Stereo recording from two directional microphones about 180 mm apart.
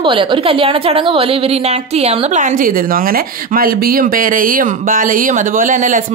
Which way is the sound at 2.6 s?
55° right (ahead or behind).